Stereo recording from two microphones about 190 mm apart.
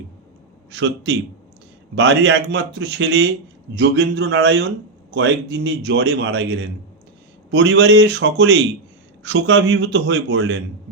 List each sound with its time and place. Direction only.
0.7 s a man's voice: 65° right (ahead or behind)